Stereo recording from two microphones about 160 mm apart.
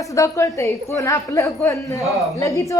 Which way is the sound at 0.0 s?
20° left (ahead or behind).